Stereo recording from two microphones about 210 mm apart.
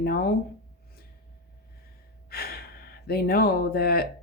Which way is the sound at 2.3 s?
45° left (ahead or behind).